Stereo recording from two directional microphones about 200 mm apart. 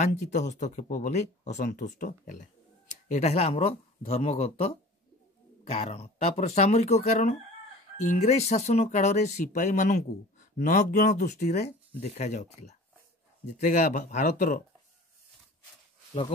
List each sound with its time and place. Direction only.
0.0 s speech: 35° left (ahead or behind)